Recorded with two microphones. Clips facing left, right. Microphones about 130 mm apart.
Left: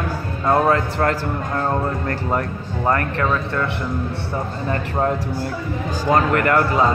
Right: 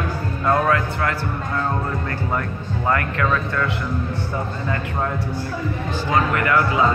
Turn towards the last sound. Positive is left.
turn(degrees=45)  # may be behind; listen again after turning